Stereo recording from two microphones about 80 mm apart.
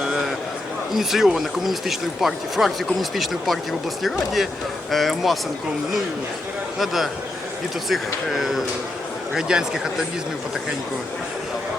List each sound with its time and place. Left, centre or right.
0.0 s a sound: centre
0.9 s speech: centre
6.7 s a man's voice: centre